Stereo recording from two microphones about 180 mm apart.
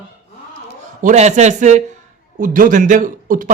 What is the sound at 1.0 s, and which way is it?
A man's voice, 40° right (ahead or behind).